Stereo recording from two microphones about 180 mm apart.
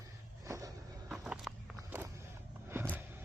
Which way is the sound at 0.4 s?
15° right (ahead or behind).